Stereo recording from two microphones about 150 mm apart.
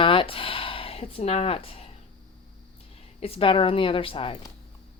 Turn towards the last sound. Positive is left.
turn(degrees=35)  # may be behind; listen again after turning